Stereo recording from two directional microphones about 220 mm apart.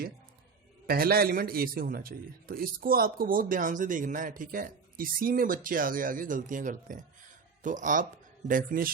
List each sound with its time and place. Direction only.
0.9 s a man's voice: 45° right (ahead or behind)